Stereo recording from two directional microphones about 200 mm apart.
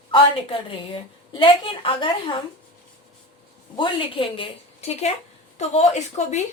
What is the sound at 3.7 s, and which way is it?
A woman's voice, 25° left (ahead or behind).